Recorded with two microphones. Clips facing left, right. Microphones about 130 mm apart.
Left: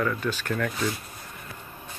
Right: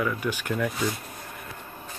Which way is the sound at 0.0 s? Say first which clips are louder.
Even; 10° right (ahead or behind).